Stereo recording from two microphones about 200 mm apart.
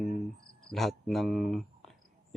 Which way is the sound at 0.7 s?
Centre (ahead or behind).